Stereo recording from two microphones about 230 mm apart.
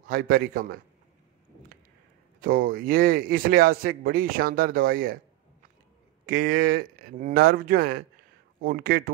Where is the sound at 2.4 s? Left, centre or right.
Right.